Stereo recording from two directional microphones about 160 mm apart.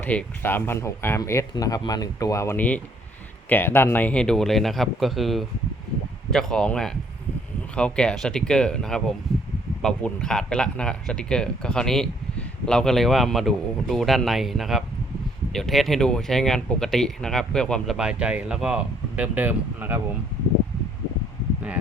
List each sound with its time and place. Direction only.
0.0 s speech: 10° left (ahead or behind); by 20.0 s 10° right (ahead or behind)